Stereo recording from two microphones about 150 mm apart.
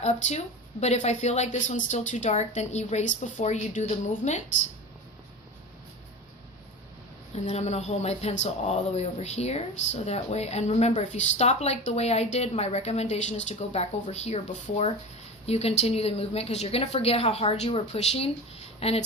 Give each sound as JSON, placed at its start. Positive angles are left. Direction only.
{"t": 0.0, "sound": "speech", "side_deg": 50}
{"t": 7.3, "sound": "a woman's voice", "side_deg": 50}